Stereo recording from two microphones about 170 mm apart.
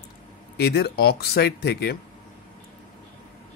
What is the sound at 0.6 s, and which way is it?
Speech, 70° left (ahead or behind).